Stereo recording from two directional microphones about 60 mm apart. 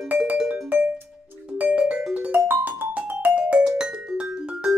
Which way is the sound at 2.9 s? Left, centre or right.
Right.